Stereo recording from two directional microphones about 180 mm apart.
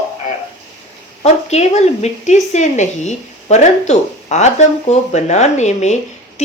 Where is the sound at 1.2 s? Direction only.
35° left (ahead or behind).